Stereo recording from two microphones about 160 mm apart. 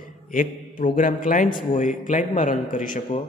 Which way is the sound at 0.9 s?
55° left (ahead or behind).